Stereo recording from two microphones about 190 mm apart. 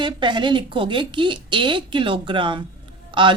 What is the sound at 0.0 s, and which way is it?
Speech, 25° right (ahead or behind).